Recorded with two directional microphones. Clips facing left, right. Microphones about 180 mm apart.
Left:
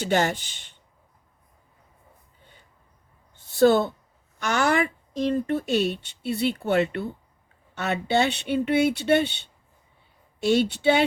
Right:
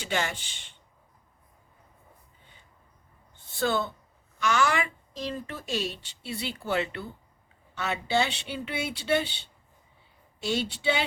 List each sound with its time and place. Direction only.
0.1 s speech: 45° left (ahead or behind)
3.6 s speech: 50° left (ahead or behind)
10.4 s speech: 60° left (ahead or behind)